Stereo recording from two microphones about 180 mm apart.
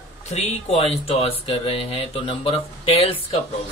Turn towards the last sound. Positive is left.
turn(degrees=30)  # may be behind; listen again after turning